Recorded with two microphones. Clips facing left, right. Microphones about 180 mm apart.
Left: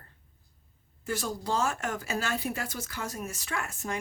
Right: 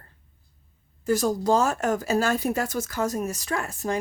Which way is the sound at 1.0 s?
40° right (ahead or behind).